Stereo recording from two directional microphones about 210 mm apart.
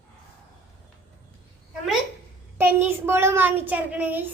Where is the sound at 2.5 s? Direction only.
10° right (ahead or behind).